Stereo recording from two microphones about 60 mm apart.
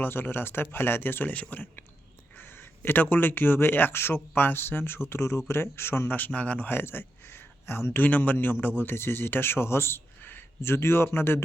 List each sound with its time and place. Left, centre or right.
0.0 s a man's voice: left
8.0 s a man's voice: left